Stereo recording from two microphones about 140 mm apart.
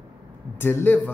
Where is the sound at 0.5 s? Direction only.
15° left (ahead or behind).